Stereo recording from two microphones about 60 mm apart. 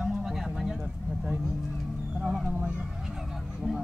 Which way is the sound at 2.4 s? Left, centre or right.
Centre.